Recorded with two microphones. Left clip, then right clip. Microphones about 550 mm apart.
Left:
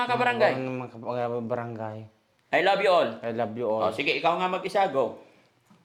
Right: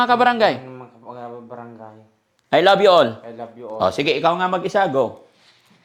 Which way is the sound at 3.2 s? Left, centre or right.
Left.